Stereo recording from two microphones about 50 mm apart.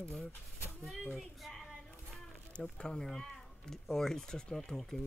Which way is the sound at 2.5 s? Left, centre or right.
Centre.